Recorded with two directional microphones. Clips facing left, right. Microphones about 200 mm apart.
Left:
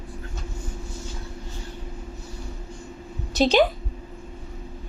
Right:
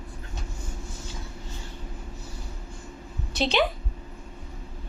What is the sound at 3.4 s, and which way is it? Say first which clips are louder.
Speech: left 6 dB; 40° left (ahead or behind).